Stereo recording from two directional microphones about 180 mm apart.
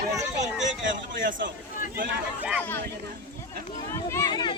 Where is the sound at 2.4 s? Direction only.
5° right (ahead or behind).